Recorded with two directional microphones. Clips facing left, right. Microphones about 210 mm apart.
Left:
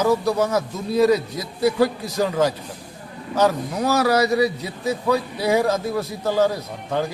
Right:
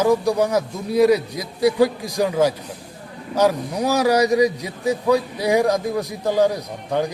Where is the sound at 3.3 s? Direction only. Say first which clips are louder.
Right 1 dB; 15° right (ahead or behind).